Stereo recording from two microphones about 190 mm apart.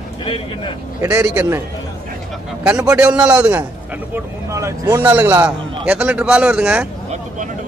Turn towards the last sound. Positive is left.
turn(degrees=-5)  # may be behind; listen again after turning